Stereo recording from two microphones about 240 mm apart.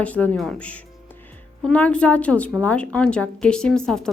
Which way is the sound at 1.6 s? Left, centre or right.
Centre.